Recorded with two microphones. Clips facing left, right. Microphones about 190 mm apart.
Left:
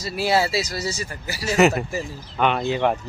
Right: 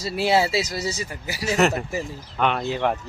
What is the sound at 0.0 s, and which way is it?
A man's voice, 25° right (ahead or behind).